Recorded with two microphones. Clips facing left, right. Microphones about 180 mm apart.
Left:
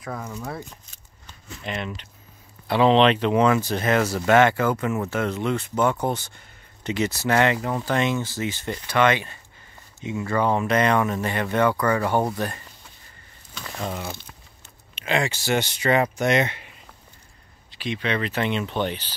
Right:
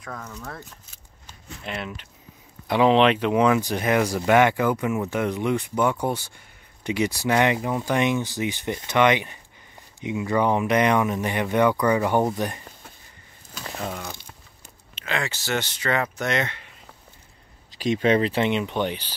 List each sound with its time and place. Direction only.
0.0 s speech: 10° left (ahead or behind)
1.6 s speech: centre (ahead or behind); by 12.6 s 15° right (ahead or behind)
13.7 s speech: centre (ahead or behind)
15.0 s speech: 15° left (ahead or behind)
17.6 s speech: 40° right (ahead or behind)
18.3 s speech: 20° right (ahead or behind)